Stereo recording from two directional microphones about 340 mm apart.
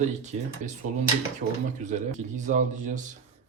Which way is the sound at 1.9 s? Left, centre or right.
Right.